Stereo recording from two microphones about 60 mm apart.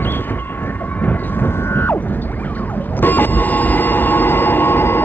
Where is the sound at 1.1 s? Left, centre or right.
Left.